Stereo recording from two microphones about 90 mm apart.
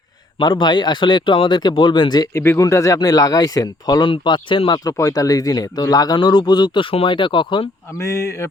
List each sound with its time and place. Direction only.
0.3 s speech: 55° left (ahead or behind)
2.3 s speech: 30° left (ahead or behind); by 4.1 s 45° left (ahead or behind)
4.1 s speech: 65° left (ahead or behind)
4.9 s speech: 40° left (ahead or behind)
6.1 s speech: 60° left (ahead or behind)
7.9 s speech: 35° left (ahead or behind)